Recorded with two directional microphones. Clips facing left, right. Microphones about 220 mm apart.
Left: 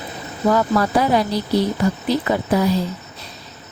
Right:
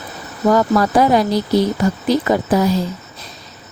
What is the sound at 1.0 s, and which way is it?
A woman's voice, 45° right (ahead or behind).